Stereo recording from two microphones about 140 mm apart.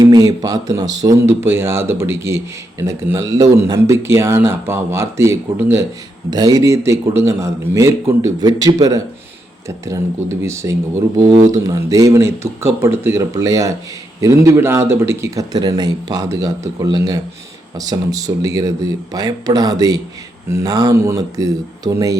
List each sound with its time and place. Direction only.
0.0 s speech: 25° right (ahead or behind)
6.3 s speech: 25° right (ahead or behind)